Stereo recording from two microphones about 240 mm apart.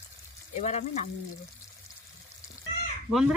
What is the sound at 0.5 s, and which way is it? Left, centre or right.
Speech, left.